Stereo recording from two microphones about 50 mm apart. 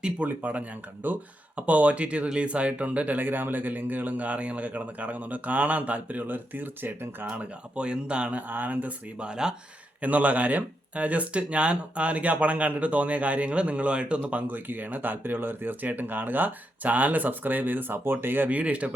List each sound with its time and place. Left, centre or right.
0.3 s speech: right
7.3 s speech: right
9.1 s speech: centre
10.0 s speech: right
14.2 s speech: right
18.5 s speech: right